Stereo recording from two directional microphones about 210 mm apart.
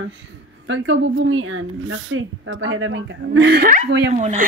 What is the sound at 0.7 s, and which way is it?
A woman's voice, 65° right (ahead or behind).